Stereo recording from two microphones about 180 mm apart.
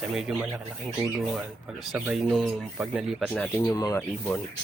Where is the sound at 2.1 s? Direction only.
Centre (ahead or behind).